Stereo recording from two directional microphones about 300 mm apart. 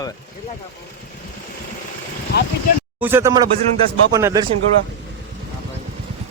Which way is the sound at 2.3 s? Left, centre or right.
Left.